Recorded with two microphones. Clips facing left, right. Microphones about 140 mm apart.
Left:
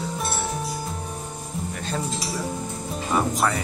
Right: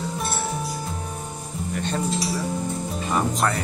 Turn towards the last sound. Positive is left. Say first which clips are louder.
# even
turn(degrees=5)  # may be behind; listen again after turning